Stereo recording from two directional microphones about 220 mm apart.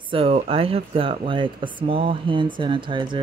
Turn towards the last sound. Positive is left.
turn(degrees=-20)  # may be behind; listen again after turning